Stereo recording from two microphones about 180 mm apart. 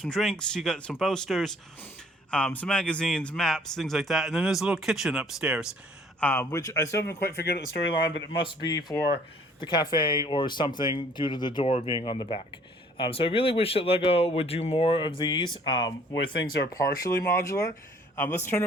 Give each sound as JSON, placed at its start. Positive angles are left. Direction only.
{"t": 0.0, "sound": "a man's voice", "side_deg": 0}
{"t": 6.1, "sound": "speech", "side_deg": 10}
{"t": 7.4, "sound": "speech", "side_deg": 75}
{"t": 8.4, "sound": "speech", "side_deg": 25}